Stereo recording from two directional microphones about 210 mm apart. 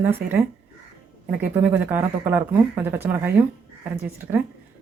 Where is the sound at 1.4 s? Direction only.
10° right (ahead or behind).